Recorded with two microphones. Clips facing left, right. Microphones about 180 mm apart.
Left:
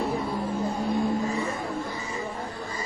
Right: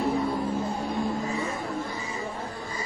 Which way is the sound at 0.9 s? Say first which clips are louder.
Left 3 dB; centre (ahead or behind).